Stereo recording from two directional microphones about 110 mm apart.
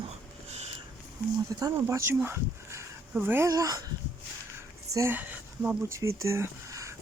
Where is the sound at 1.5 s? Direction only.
30° right (ahead or behind).